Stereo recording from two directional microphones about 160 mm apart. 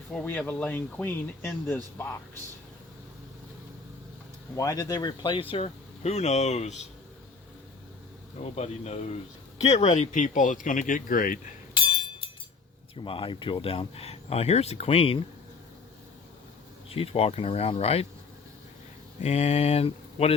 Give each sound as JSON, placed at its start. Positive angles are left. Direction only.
{"t": 0.1, "sound": "speech", "side_deg": 10}
{"t": 4.5, "sound": "speech", "side_deg": 20}
{"t": 8.4, "sound": "speech", "side_deg": 40}
{"t": 11.7, "sound": "a sound", "side_deg": 35}
{"t": 13.0, "sound": "speech", "side_deg": 30}
{"t": 16.9, "sound": "speech", "side_deg": 35}
{"t": 19.2, "sound": "speech", "side_deg": 45}